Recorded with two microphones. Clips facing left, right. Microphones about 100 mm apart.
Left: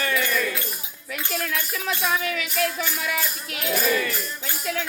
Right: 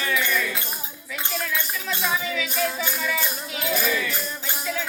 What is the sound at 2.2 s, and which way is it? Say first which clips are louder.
Music: left 1 dB; 65° left (ahead or behind).